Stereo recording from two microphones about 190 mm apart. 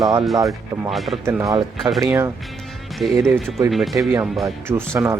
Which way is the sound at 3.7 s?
Centre (ahead or behind).